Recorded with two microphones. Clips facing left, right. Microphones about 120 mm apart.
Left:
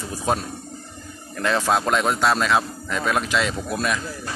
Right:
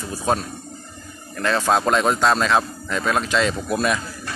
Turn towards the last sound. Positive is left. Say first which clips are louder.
# right 3 dB
turn(degrees=0)  # may be behind; listen again after turning